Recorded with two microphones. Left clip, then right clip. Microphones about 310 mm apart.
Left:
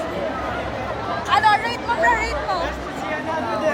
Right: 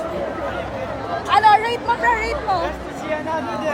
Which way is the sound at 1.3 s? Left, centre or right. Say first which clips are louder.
Right 3 dB; right.